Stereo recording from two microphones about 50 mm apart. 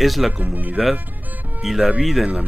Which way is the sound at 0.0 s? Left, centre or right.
Centre.